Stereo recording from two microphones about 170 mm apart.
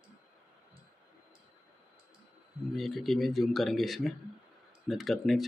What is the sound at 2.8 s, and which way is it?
Speech, centre (ahead or behind).